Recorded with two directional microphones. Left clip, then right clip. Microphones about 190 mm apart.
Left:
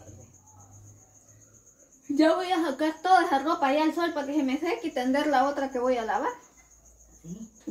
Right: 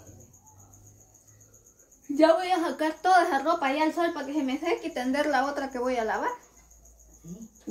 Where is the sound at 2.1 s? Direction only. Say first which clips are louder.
Right 2 dB; 30° right (ahead or behind).